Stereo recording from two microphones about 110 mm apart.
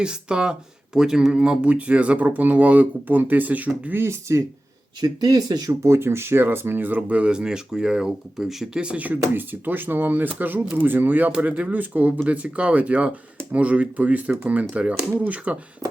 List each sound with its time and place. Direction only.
0.0 s speech: 10° right (ahead or behind); by 4.4 s 25° right (ahead or behind)
4.9 s speech: 40° right (ahead or behind)
5.8 s speech: 25° right (ahead or behind)